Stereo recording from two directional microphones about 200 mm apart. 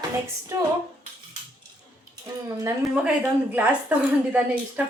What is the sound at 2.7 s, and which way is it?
A woman's voice, 5° right (ahead or behind).